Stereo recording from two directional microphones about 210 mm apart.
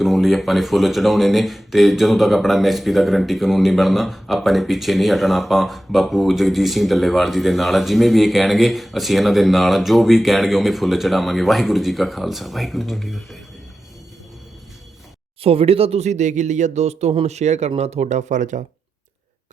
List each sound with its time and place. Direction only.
0.0 s speech: centre (ahead or behind)
15.4 s speech: 25° right (ahead or behind)